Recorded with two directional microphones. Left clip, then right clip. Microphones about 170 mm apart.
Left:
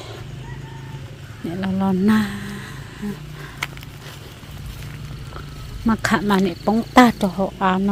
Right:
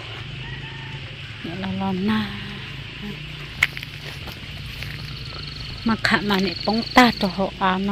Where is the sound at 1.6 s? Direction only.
40° left (ahead or behind).